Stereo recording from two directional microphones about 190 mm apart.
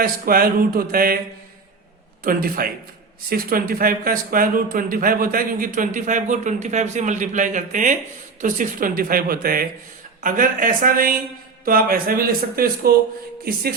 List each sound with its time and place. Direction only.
0.0 s speech: 50° right (ahead or behind)
2.2 s speech: 50° right (ahead or behind)